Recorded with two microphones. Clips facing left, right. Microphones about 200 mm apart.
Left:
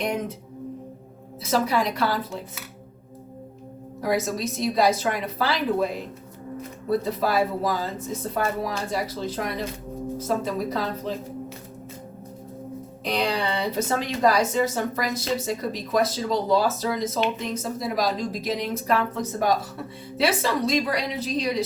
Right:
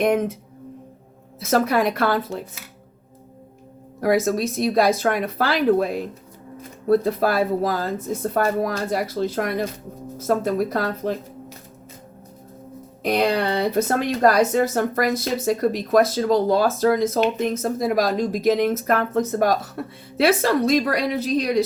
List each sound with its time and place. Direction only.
0.0 s a woman's voice: 50° right (ahead or behind)
1.5 s a woman's voice: 55° right (ahead or behind)
4.0 s speech: 55° right (ahead or behind)
13.0 s a woman's voice: 55° right (ahead or behind)